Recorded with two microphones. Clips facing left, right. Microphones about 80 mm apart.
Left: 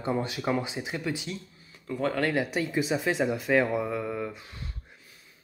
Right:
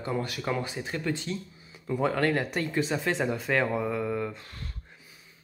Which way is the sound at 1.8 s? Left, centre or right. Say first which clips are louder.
Right 2 dB; centre.